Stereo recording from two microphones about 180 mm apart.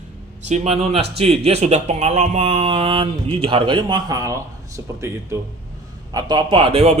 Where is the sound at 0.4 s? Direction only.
40° right (ahead or behind).